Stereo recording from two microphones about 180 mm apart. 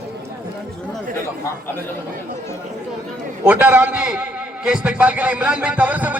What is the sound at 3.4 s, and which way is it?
A man's voice, 10° right (ahead or behind).